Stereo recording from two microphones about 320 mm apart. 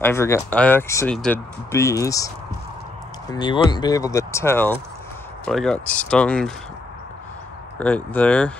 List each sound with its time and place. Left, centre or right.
0.0 s speech: centre
7.8 s speech: centre